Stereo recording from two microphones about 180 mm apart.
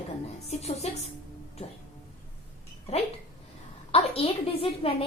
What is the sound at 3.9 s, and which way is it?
A woman's voice, 30° left (ahead or behind).